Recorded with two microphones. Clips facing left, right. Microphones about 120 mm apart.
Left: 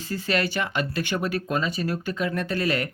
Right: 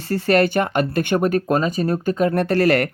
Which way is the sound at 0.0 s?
65° right (ahead or behind).